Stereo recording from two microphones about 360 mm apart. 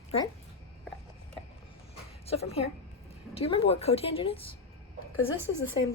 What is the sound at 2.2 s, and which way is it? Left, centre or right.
A woman's voice, centre.